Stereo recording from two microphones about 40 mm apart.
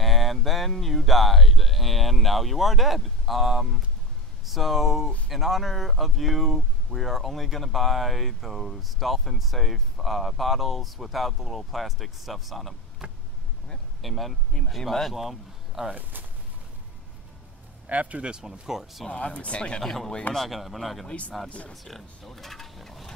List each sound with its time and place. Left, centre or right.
0.0 s speech: centre
13.0 s vehicle: centre
14.0 s speech: centre
14.5 s speech: left
14.9 s speech: centre
15.1 s speech: centre
15.9 s speech: right
17.8 s speech: right
18.2 s speech: centre
19.0 s speech: left
19.8 s speech: centre
21.5 s speech: left
21.7 s speech: centre